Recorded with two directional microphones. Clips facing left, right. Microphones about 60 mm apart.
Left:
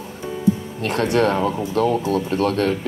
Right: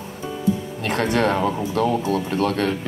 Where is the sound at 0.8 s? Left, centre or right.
Right.